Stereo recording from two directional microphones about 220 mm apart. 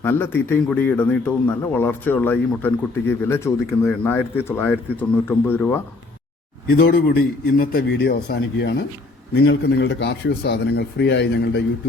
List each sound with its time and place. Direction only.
0.0 s speech: 10° left (ahead or behind)
6.7 s speech: 45° left (ahead or behind)